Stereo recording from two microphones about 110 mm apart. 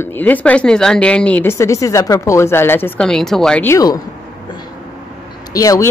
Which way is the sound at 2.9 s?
5° left (ahead or behind).